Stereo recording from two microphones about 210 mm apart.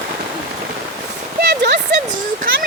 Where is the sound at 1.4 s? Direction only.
55° right (ahead or behind).